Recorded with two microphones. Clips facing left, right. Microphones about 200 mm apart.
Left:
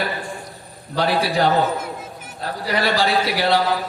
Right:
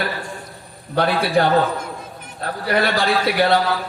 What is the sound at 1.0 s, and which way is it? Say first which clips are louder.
Speech: right 2 dB; 55° right (ahead or behind).